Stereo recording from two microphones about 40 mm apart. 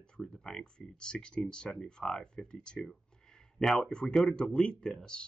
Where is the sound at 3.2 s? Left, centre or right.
Centre.